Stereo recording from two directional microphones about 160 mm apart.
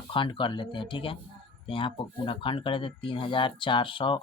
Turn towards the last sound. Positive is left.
turn(degrees=30)  # may be behind; listen again after turning